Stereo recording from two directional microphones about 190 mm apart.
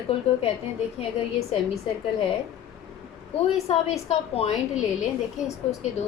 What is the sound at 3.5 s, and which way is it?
Speech, 35° left (ahead or behind).